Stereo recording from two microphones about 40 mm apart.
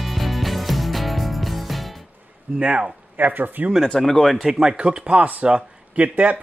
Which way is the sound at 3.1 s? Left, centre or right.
Right.